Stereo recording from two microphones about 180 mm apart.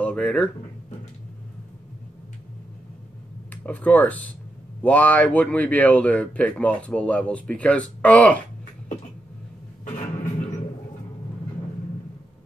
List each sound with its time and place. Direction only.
0.0 s speech: 5° left (ahead or behind)
3.6 s speech: 10° left (ahead or behind)
9.8 s a sound: 45° left (ahead or behind)